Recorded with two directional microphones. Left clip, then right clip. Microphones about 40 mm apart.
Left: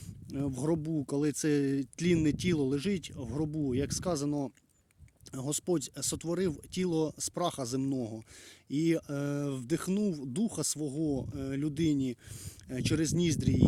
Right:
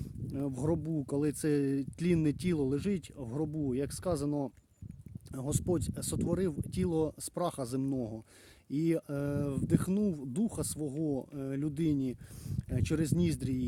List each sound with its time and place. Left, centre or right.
0.3 s speech: right
3.5 s speech: right
8.7 s speech: right
10.0 s speech: right
10.3 s speech: right
10.8 s speech: right
11.3 s speech: right